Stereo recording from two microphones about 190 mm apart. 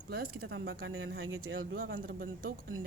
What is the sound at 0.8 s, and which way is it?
Speech, 90° right.